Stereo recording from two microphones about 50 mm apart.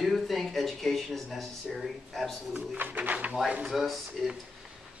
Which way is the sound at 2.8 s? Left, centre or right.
Right.